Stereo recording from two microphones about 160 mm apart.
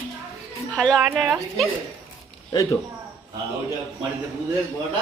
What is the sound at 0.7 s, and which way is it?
Speech, 5° left (ahead or behind).